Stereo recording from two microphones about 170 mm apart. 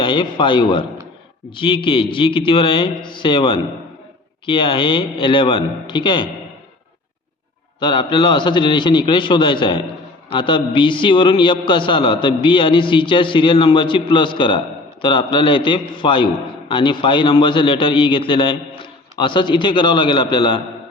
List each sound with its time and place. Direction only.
0.0 s a man's voice: 30° left (ahead or behind)
7.8 s a man's voice: 30° left (ahead or behind)